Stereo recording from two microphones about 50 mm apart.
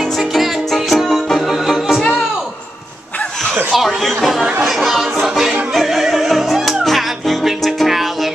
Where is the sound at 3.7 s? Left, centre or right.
Centre.